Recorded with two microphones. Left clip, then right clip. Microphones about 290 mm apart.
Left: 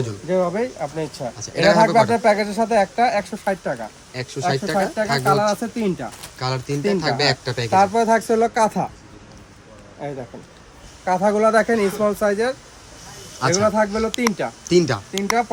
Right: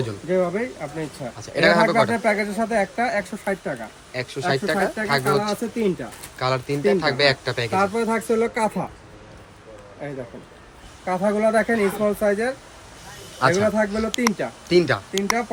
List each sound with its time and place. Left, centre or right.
0.3 s speech: centre
11.0 s speech: centre